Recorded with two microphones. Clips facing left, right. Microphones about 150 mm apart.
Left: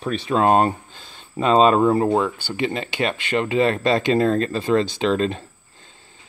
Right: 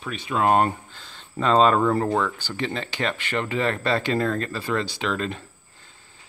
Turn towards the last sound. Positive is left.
turn(degrees=25)  # may be behind; listen again after turning